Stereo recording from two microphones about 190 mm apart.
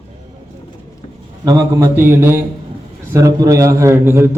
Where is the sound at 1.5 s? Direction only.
15° right (ahead or behind).